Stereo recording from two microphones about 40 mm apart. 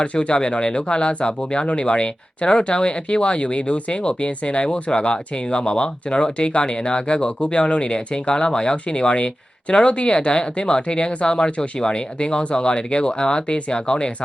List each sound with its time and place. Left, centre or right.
0.0 s speech: left